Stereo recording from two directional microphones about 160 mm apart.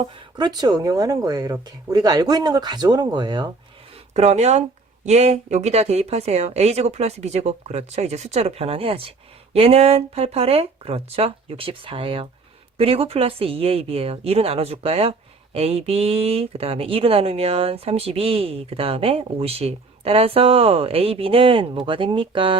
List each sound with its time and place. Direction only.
0.3 s speech: 25° right (ahead or behind)
4.1 s speech: 45° right (ahead or behind)